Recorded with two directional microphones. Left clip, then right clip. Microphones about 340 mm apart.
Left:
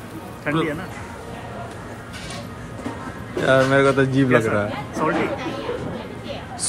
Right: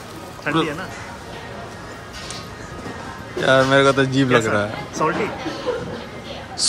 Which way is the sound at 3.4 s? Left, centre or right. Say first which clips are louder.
Right 2 dB; centre.